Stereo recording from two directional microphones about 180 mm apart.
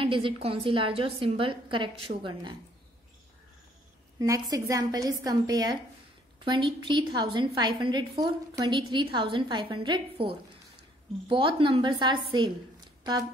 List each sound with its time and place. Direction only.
0.0 s a woman's voice: 30° right (ahead or behind)
4.2 s a woman's voice: 20° right (ahead or behind)